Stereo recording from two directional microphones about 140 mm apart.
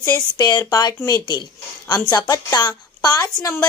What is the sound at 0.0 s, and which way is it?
A woman's voice, 25° left (ahead or behind).